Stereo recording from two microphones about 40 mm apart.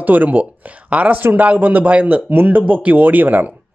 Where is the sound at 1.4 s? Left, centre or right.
Right.